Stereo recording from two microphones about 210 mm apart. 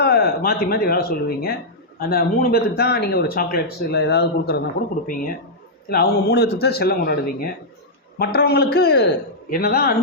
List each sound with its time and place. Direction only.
0.0 s speech: 45° left (ahead or behind)
5.9 s speech: 50° left (ahead or behind)